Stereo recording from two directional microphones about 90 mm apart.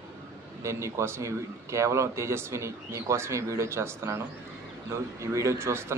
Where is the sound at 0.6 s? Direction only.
35° right (ahead or behind).